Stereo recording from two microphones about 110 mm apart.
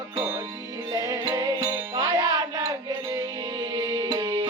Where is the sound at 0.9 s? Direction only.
35° right (ahead or behind).